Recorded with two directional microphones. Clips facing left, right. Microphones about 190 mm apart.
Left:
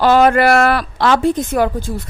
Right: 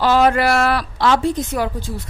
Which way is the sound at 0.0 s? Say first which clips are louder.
Left 4 dB; 55° left (ahead or behind).